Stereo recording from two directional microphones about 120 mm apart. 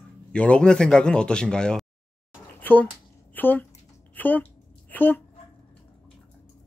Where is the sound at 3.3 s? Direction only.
15° left (ahead or behind).